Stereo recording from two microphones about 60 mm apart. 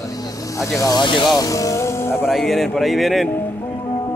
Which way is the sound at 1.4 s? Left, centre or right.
Left.